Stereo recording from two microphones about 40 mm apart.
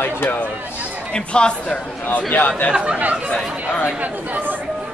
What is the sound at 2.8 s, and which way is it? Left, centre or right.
Speech, right.